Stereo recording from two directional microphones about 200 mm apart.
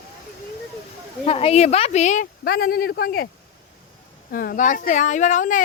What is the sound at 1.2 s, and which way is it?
Speech, 30° left (ahead or behind).